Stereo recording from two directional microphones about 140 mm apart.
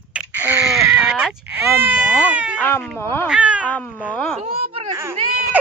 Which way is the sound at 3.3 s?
10° right (ahead or behind).